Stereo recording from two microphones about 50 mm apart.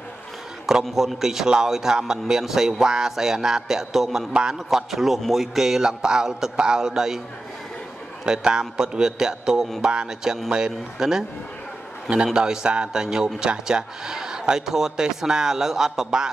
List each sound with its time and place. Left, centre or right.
0.8 s a man's voice: centre
4.3 s a man's voice: centre
4.6 s a man's voice: centre
8.3 s a man's voice: centre
12.4 s a man's voice: centre